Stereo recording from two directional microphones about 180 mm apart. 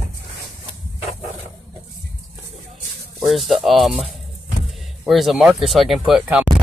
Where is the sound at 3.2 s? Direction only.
Centre (ahead or behind).